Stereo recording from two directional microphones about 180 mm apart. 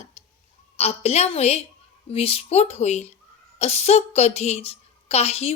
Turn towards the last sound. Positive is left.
turn(degrees=35)  # may be behind; listen again after turning